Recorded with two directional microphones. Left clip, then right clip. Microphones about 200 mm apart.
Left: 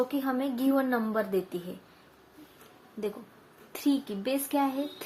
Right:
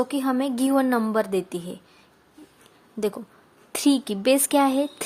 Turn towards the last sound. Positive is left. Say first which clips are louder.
# right 9 dB
turn(degrees=-60)  # may be behind; listen again after turning